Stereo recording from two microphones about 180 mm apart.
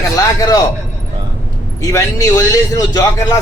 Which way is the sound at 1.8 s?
20° left (ahead or behind).